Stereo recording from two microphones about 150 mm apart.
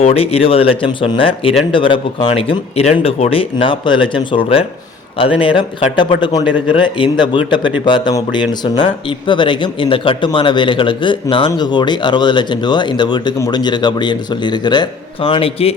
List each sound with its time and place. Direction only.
0.0 s speech: 40° left (ahead or behind)